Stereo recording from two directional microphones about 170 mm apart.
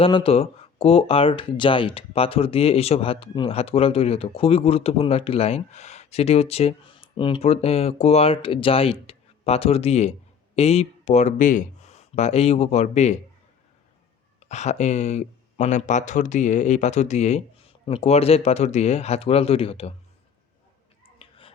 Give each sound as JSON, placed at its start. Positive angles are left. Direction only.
{"t": 0.0, "sound": "speech", "side_deg": 30}
{"t": 14.4, "sound": "speech", "side_deg": 40}
{"t": 21.2, "sound": "a sound", "side_deg": 35}